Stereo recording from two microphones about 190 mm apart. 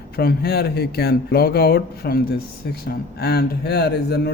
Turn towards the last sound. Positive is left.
turn(degrees=55)  # may be behind; listen again after turning